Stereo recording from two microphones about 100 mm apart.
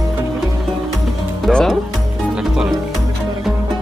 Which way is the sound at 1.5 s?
10° left (ahead or behind).